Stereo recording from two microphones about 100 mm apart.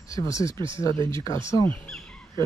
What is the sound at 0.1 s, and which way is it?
Speech, 35° left (ahead or behind).